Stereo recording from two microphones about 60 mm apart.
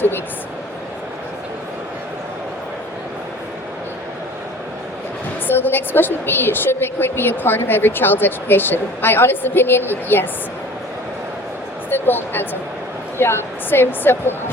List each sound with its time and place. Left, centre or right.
5.5 s a woman's voice: left
11.9 s a woman's voice: left